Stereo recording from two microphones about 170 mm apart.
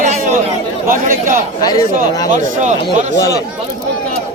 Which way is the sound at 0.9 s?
50° right (ahead or behind).